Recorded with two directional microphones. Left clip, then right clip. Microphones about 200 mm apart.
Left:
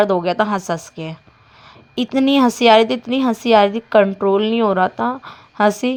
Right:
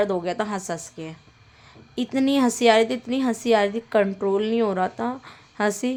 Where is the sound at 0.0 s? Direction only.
20° left (ahead or behind).